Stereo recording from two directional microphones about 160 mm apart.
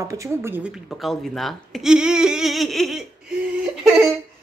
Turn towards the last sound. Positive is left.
turn(degrees=0)  # may be behind; listen again after turning